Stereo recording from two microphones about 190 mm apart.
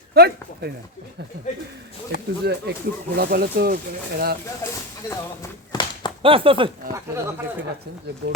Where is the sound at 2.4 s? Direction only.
55° right (ahead or behind).